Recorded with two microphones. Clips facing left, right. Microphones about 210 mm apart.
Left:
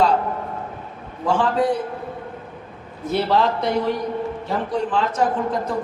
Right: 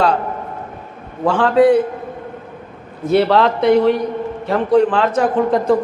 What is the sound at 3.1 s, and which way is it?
A man's voice, 70° right (ahead or behind).